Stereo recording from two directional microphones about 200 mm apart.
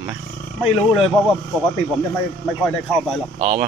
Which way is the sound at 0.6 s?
Centre (ahead or behind).